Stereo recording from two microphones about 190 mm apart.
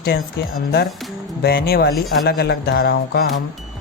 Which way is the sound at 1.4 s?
55° left (ahead or behind).